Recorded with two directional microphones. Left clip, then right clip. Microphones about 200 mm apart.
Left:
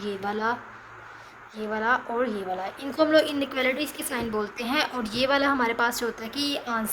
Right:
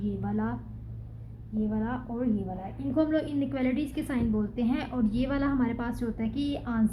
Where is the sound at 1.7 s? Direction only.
30° left (ahead or behind).